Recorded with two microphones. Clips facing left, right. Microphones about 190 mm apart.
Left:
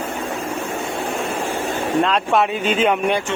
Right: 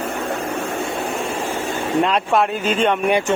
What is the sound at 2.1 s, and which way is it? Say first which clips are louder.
Speech: even; centre (ahead or behind).